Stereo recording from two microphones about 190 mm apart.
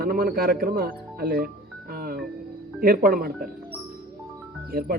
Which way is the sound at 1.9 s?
50° right (ahead or behind).